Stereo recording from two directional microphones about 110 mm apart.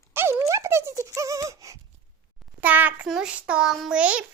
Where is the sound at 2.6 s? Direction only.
15° right (ahead or behind).